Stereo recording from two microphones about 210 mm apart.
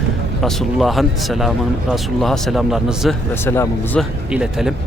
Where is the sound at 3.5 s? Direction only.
10° left (ahead or behind).